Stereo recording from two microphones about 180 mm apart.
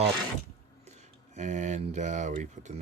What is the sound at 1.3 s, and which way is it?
Speech, 40° right (ahead or behind).